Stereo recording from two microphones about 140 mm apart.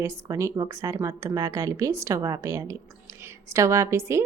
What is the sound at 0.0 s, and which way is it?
A woman's voice, 20° right (ahead or behind).